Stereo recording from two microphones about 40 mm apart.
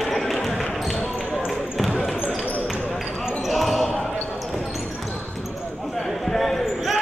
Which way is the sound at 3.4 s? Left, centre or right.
Centre.